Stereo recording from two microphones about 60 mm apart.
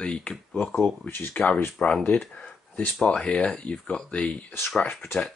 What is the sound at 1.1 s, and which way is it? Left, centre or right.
Speech, left.